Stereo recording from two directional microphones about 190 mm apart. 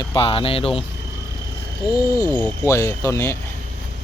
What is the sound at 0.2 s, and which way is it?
Speech, 30° left (ahead or behind).